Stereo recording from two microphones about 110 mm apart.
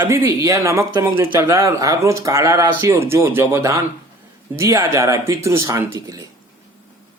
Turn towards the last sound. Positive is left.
turn(degrees=-30)  # may be behind; listen again after turning